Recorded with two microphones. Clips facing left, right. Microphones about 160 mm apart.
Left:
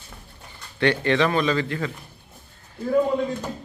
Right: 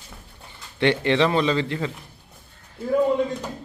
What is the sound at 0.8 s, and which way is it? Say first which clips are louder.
Speech: right 1 dB; 20° right (ahead or behind).